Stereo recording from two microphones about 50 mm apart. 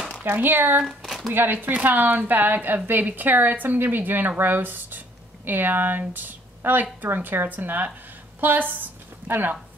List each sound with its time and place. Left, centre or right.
0.2 s speech: right
0.8 s a sound: centre
1.3 s speech: right
1.7 s a woman's voice: right